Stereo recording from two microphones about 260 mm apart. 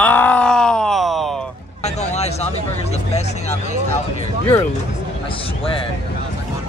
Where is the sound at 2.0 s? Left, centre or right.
Left.